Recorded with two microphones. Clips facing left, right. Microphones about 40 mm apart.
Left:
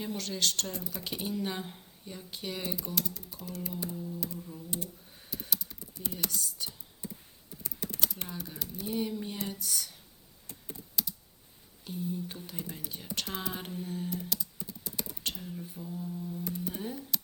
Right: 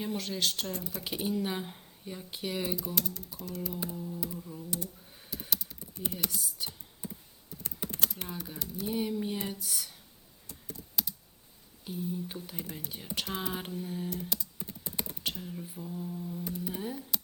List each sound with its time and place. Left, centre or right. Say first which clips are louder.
0.2 s mantra: even; centre
2.7 s speech: right 1 dB; centre
3.8 s mantra: even; centre
5.3 s computer keyboard: even; centre
6.1 s speech: even; centre
8.1 s speech: right 1 dB; centre
8.9 s mantra: right 2 dB; centre
11.0 s computer keyboard: even; centre
11.9 s mantra: even; centre
13.7 s speech: even; centre
14.7 s typing: right 1 dB; right
15.2 s mantra: right 1 dB; centre